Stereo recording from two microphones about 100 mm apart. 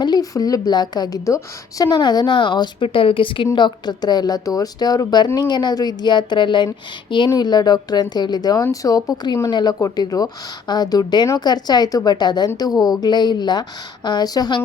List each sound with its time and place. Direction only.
0.0 s a woman's voice: 40° left (ahead or behind)